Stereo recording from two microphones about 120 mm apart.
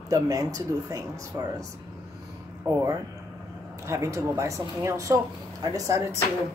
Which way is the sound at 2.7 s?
25° right (ahead or behind).